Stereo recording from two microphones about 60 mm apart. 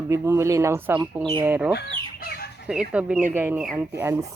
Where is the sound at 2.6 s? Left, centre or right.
Centre.